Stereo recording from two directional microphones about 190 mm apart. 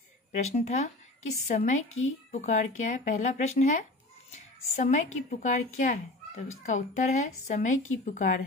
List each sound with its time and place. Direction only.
0.4 s a woman's voice: 35° left (ahead or behind)
1.5 s a woman's voice: 50° left (ahead or behind)